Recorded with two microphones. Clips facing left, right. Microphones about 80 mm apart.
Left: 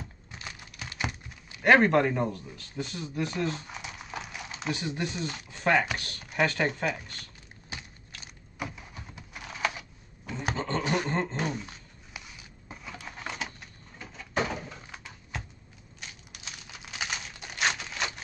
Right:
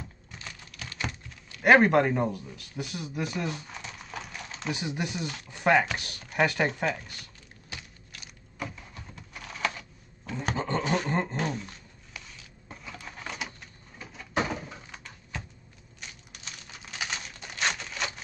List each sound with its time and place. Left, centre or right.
0.3 s typing: centre
1.6 s speech: centre
3.6 s a sound: centre
4.7 s speech: centre
6.7 s speech: centre
8.5 s typewriter: centre
10.5 s a sound: centre
11.3 s a sound: centre
16.0 s typing: centre